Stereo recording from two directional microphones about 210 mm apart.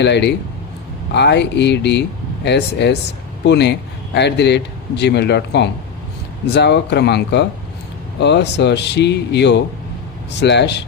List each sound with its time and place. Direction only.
0.0 s speech: 55° left (ahead or behind)